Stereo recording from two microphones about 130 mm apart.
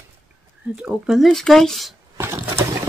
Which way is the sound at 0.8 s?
Centre (ahead or behind).